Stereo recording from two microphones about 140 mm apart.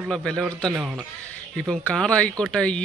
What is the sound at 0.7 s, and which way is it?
Speech, 10° right (ahead or behind).